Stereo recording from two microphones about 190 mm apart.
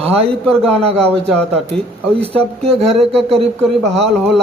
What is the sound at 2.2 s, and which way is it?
Speech, 30° right (ahead or behind).